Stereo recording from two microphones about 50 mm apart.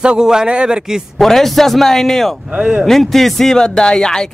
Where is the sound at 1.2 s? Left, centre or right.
Centre.